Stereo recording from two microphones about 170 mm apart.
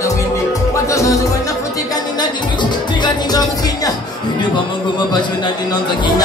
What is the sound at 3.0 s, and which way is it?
Music, 25° left (ahead or behind).